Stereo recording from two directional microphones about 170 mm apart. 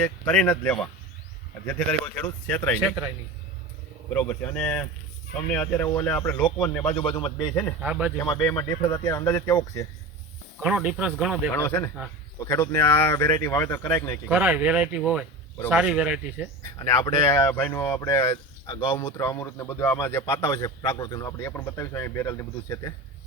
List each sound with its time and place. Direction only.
0.0 s speech: 10° left (ahead or behind)
2.8 s speech: 10° right (ahead or behind)
4.1 s speech: 10° left (ahead or behind)
6.9 s a man's voice: 30° left (ahead or behind)
7.8 s speech: 5° right (ahead or behind)
8.2 s speech: 15° left (ahead or behind)
10.6 s speech: 5° right (ahead or behind)
11.5 s speech: 15° left (ahead or behind)
14.3 s speech: 10° right (ahead or behind)
16.6 s speech: 20° left (ahead or behind)